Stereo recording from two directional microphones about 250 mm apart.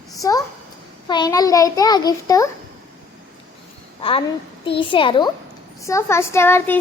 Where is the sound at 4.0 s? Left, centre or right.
Left.